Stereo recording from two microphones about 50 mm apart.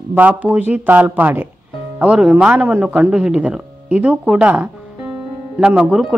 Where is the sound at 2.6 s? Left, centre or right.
Right.